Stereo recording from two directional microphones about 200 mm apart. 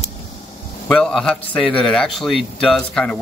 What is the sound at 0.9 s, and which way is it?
A man's voice, 5° left (ahead or behind).